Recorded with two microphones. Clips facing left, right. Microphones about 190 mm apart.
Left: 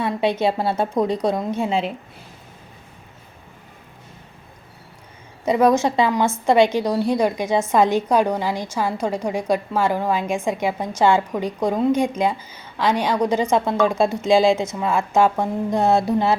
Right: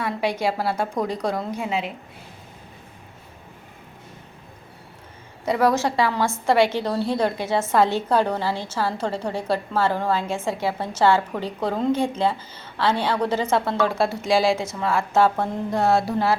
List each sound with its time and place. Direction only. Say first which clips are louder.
0.0 s a woman's voice: left 4 dB; 25° left (ahead or behind)
5.5 s a woman's voice: left 4 dB; 20° left (ahead or behind)